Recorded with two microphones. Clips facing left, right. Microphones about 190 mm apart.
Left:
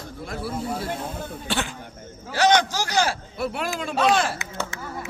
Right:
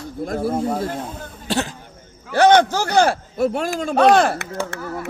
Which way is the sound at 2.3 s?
55° right (ahead or behind).